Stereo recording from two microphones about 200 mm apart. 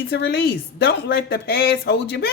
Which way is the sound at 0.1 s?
60° left (ahead or behind).